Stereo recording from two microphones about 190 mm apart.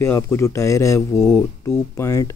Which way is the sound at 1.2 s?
Centre (ahead or behind).